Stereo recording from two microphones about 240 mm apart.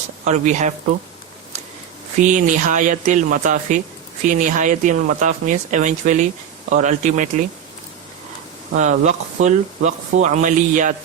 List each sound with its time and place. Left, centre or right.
0.3 s speech: right
2.2 s speech: right
8.7 s speech: right